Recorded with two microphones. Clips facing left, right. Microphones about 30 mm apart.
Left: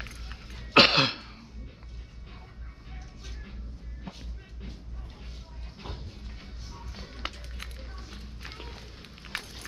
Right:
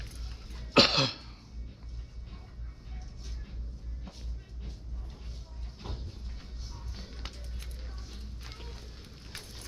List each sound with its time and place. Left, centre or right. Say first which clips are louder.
0.0 s throat clearing: left 6 dB; left
4.1 s music: left 7 dB; left
5.8 s music: left 2 dB; left
7.2 s music: left 8 dB; left
7.8 s music: left 4 dB; left
9.3 s fire: left 9 dB; left